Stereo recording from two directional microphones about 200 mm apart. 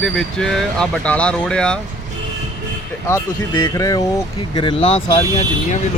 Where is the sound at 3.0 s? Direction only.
15° left (ahead or behind).